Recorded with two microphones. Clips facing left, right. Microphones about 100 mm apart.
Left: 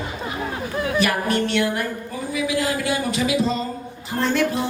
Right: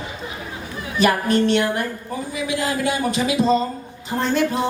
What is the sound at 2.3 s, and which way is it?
Speech, 30° right (ahead or behind).